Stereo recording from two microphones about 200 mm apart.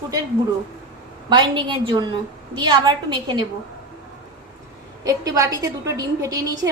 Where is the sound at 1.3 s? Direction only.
25° right (ahead or behind).